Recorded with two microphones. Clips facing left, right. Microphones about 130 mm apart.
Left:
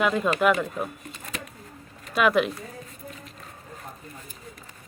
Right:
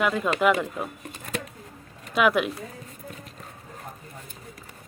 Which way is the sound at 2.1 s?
10° right (ahead or behind).